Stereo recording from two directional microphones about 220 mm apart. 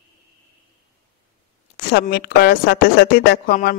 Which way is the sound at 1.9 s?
45° left (ahead or behind).